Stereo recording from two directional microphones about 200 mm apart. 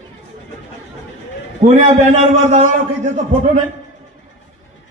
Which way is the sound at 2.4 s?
35° right (ahead or behind).